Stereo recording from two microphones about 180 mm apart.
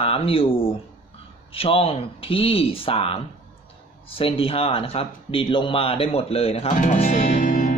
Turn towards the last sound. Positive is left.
turn(degrees=45)  # may be behind; listen again after turning